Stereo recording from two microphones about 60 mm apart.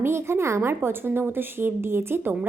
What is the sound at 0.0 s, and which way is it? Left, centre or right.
A woman's voice, right.